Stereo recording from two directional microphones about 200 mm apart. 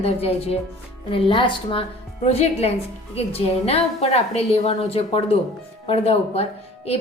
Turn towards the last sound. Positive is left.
turn(degrees=30)  # may be behind; listen again after turning